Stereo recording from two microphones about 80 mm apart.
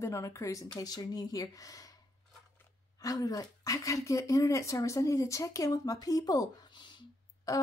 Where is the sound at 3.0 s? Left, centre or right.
Left.